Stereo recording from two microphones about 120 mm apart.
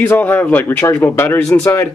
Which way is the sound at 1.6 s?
20° left (ahead or behind).